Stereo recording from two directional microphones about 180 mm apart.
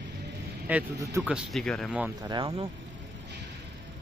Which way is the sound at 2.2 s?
30° right (ahead or behind).